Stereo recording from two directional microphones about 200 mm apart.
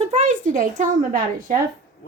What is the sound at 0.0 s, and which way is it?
A child's voice, 35° right (ahead or behind).